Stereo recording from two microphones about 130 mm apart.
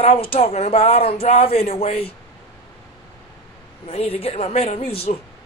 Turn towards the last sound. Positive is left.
turn(degrees=50)  # may be behind; listen again after turning